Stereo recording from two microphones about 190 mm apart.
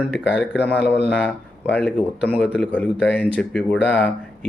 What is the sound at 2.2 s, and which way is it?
Speech, 5° right (ahead or behind).